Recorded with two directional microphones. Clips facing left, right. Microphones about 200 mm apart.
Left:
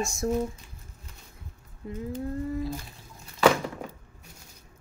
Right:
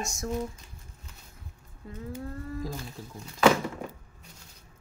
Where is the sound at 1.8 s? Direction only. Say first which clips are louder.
Left 6 dB; 20° left (ahead or behind).